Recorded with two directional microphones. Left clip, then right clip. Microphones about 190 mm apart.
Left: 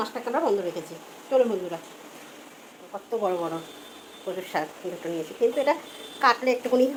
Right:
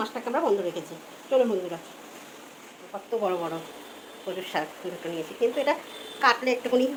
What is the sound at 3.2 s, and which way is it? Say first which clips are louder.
A woman's voice: left 1 dB; centre (ahead or behind).